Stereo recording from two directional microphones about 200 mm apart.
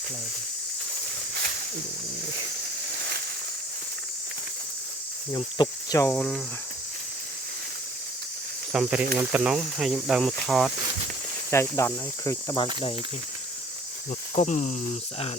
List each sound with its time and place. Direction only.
5.3 s cricket: 20° left (ahead or behind)
6.1 s speech: centre (ahead or behind)
8.7 s speech: 5° right (ahead or behind)
11.5 s cricket: 15° left (ahead or behind)
14.3 s cricket: 35° left (ahead or behind)